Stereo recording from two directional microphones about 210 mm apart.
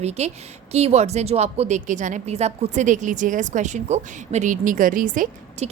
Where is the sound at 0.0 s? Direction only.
30° right (ahead or behind).